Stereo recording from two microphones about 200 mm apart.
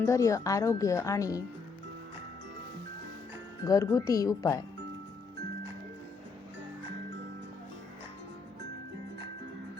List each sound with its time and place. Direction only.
0.0 s speech: 15° left (ahead or behind)
3.6 s speech: 15° left (ahead or behind)